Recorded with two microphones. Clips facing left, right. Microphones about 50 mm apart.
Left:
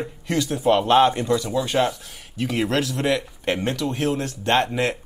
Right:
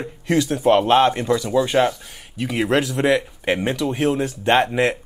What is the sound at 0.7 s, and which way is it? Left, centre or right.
Speech, centre.